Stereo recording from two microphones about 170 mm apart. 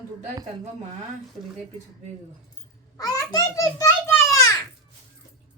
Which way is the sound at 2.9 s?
20° left (ahead or behind).